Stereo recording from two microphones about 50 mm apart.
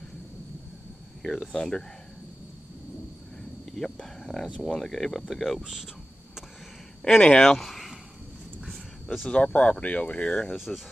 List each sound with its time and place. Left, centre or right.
1.2 s speech: centre
3.7 s cricket: centre
4.6 s speech: centre
7.2 s speech: left
7.4 s speech: centre
9.3 s speech: left
10.5 s speech: centre